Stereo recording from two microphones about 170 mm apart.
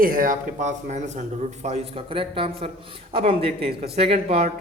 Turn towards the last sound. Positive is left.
turn(degrees=-35)  # may be behind; listen again after turning